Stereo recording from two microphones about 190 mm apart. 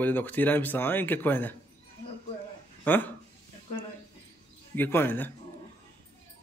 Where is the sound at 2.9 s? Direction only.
10° left (ahead or behind).